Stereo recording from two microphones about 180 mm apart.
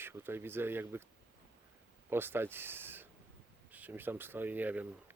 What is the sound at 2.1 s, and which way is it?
A man's voice, 10° right (ahead or behind).